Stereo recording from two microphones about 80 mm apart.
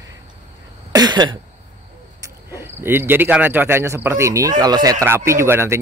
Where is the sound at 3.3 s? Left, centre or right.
Right.